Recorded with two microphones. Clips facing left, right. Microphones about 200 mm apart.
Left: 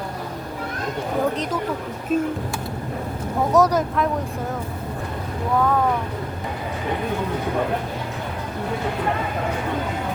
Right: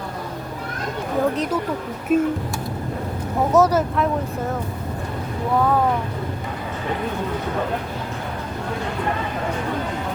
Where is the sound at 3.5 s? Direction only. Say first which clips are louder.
Right 1 dB; 5° right (ahead or behind).